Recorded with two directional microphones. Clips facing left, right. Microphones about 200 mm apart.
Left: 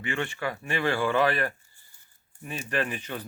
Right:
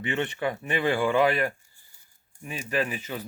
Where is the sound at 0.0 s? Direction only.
20° right (ahead or behind).